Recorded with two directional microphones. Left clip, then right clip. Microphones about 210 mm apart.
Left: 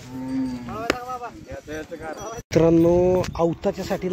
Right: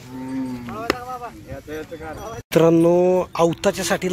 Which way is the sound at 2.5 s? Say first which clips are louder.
Right 2 dB; centre (ahead or behind).